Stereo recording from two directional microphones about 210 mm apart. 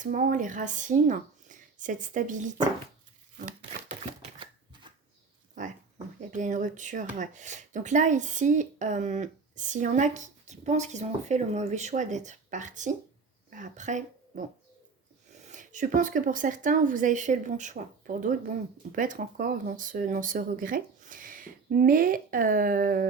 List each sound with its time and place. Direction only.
0.0 s speech: 40° right (ahead or behind)
3.3 s shuffling cards: 30° right (ahead or behind)
5.6 s pig: 35° right (ahead or behind)
6.1 s speech: 35° right (ahead or behind)